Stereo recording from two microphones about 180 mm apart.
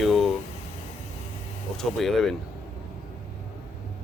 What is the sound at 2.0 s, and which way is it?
Speech, centre (ahead or behind).